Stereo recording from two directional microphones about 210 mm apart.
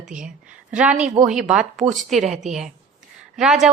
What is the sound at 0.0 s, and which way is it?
A woman's voice, 5° right (ahead or behind).